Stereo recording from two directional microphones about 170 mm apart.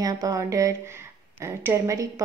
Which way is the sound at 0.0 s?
20° right (ahead or behind).